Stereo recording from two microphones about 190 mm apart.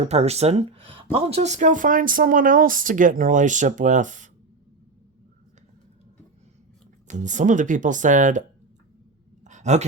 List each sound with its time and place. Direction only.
0.1 s speech: 35° right (ahead or behind)
7.1 s speech: 40° right (ahead or behind)
9.4 s a sound: 40° right (ahead or behind)